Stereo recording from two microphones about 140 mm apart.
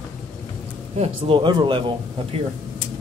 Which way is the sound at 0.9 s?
45° right (ahead or behind).